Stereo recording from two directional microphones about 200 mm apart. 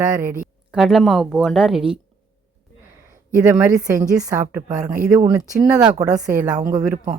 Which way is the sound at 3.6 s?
15° right (ahead or behind).